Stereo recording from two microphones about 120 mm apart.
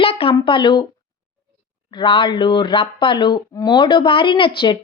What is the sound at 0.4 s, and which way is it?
Speech, 40° left (ahead or behind).